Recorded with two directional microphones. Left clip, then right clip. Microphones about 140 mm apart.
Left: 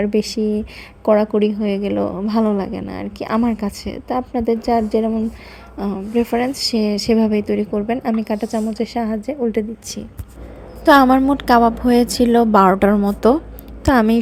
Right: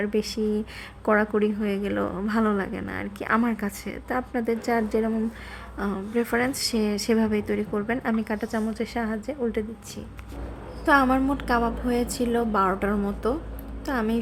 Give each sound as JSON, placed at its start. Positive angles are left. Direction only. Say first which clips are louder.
{"t": 0.0, "sound": "a woman's voice", "louder": "left 7 dB", "side_deg": 30}